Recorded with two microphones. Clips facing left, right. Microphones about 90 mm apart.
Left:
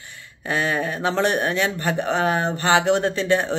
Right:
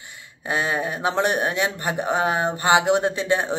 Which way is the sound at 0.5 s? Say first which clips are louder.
Left 1 dB; 20° right (ahead or behind).